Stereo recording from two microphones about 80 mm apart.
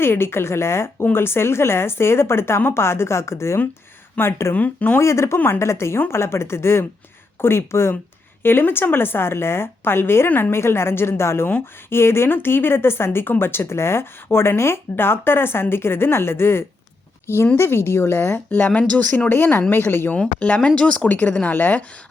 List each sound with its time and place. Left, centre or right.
0.0 s speech: left
4.5 s a woman's voice: left
4.9 s a woman's voice: left
18.5 s a woman's voice: centre
20.1 s a woman's voice: centre